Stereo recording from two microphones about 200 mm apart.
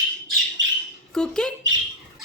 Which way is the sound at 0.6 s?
65° right (ahead or behind).